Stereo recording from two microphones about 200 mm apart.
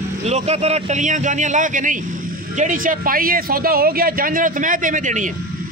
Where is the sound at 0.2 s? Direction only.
30° right (ahead or behind).